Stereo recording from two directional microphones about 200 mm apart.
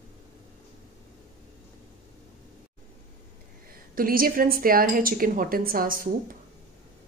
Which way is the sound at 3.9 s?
45° right (ahead or behind).